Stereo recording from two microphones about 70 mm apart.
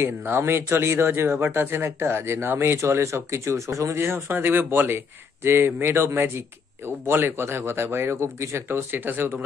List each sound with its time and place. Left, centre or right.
0.0 s speech: right
2.8 s speech: right
4.0 s speech: right